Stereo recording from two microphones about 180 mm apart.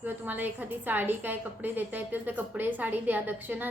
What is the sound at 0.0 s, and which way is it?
A woman's voice, 10° right (ahead or behind).